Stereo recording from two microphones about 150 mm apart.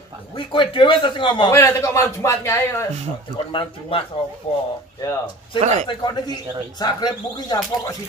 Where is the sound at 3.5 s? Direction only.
35° left (ahead or behind).